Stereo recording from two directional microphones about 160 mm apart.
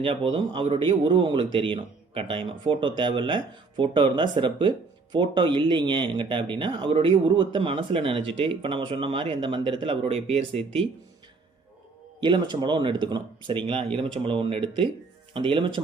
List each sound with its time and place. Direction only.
0.0 s speech: 35° right (ahead or behind)
12.2 s speech: 30° right (ahead or behind)